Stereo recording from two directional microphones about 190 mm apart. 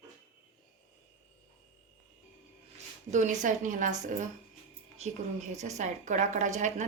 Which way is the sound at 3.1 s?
40° right (ahead or behind).